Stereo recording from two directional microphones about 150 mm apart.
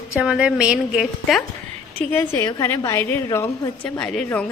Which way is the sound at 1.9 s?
10° left (ahead or behind).